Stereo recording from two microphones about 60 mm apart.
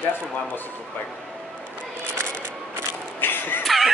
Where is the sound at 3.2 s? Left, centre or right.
Left.